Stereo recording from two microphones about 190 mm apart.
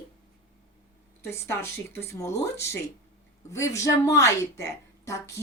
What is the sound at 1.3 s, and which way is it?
A woman's voice, 15° left (ahead or behind).